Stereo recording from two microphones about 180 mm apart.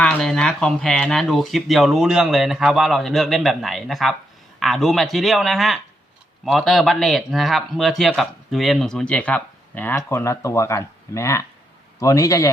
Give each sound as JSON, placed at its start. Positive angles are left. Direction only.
{"t": 0.0, "sound": "a man's voice", "side_deg": 5}